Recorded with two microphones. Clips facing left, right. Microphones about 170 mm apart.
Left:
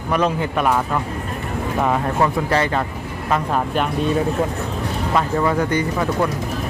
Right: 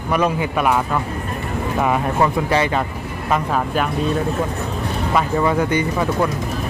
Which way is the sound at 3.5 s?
Centre (ahead or behind).